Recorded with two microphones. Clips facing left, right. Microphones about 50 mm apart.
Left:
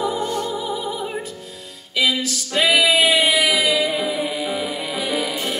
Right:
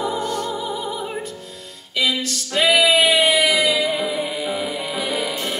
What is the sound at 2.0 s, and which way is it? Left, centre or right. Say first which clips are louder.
Singing: left 1 dB; centre.